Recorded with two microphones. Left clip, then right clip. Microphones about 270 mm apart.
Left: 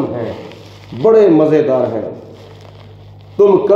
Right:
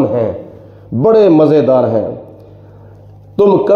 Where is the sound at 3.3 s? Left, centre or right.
Right.